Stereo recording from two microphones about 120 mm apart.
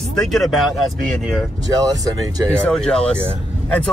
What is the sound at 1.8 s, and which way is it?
Speech, 30° right (ahead or behind).